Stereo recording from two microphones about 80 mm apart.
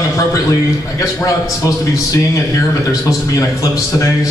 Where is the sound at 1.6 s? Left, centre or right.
Left.